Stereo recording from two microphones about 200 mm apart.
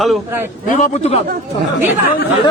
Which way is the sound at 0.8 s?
35° left (ahead or behind).